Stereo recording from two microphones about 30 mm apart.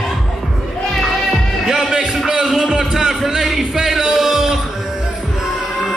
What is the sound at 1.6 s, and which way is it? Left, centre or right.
Music, centre.